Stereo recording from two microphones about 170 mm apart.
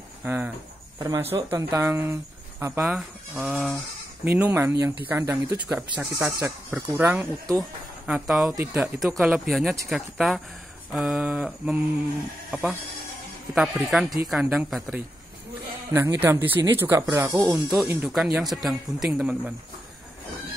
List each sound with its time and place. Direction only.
0.2 s speech: 10° right (ahead or behind)
0.9 s speech: 20° right (ahead or behind)
2.8 s speech: centre (ahead or behind)
8.1 s speech: 5° right (ahead or behind); by 17.6 s 20° right (ahead or behind)
17.6 s speech: 5° right (ahead or behind)